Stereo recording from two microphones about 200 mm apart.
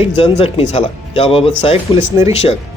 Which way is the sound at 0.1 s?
30° left (ahead or behind).